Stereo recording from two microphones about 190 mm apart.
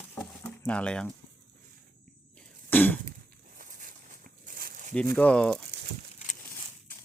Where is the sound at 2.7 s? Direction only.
10° left (ahead or behind).